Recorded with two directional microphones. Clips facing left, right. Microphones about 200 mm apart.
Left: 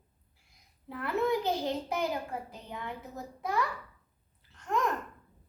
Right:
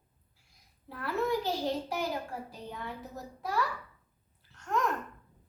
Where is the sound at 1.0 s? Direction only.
20° left (ahead or behind).